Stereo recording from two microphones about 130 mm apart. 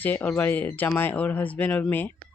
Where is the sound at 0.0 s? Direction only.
15° left (ahead or behind).